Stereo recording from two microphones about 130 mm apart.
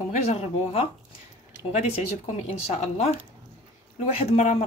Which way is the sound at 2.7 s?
55° left (ahead or behind).